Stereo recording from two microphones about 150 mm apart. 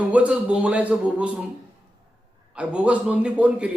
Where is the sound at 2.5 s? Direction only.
10° right (ahead or behind).